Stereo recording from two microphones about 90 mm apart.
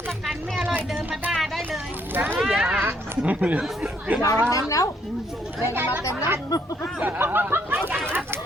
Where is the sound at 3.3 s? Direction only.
15° right (ahead or behind).